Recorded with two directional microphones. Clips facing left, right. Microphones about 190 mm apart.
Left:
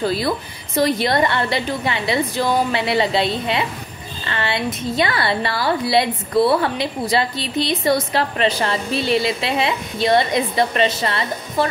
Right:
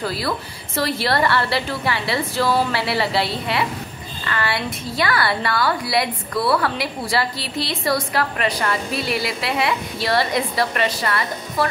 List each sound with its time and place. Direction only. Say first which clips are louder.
0.0 s a woman's voice: left 4 dB; 20° left (ahead or behind)